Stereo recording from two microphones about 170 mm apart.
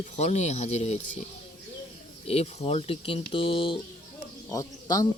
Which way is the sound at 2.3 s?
35° left (ahead or behind).